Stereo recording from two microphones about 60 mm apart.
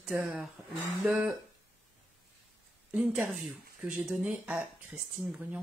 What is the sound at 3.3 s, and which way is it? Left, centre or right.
Speech, centre.